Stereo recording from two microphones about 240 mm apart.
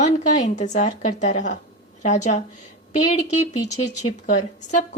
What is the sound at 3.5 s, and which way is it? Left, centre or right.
Speech, left.